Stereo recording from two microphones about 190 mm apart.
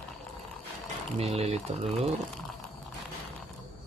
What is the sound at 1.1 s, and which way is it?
Speech, 30° right (ahead or behind).